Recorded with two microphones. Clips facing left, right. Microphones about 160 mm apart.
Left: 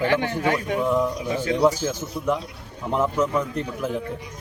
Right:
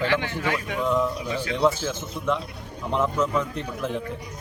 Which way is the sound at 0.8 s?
15° left (ahead or behind).